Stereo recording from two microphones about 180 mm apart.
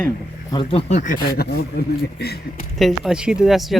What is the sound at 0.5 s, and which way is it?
Speech, 30° left (ahead or behind).